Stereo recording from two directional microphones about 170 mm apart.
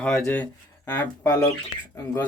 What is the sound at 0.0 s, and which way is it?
Speech, 10° left (ahead or behind).